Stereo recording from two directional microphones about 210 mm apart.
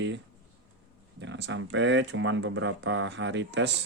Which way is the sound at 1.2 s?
60° right (ahead or behind).